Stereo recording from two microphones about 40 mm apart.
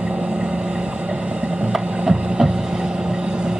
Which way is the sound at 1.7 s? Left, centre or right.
Centre.